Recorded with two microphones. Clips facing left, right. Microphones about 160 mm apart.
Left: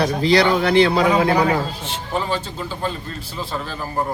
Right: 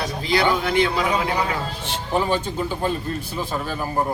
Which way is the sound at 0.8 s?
40° left (ahead or behind).